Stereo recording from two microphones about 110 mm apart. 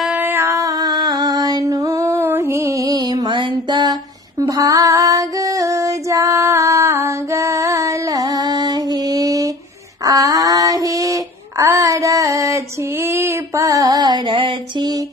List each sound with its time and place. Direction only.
0.2 s music: 20° right (ahead or behind); by 3.9 s 45° right (ahead or behind)
4.4 s female singing: 30° right (ahead or behind)
10.0 s child singing: 30° right (ahead or behind)